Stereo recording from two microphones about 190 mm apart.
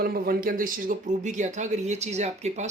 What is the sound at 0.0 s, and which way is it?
Speech, 55° right (ahead or behind).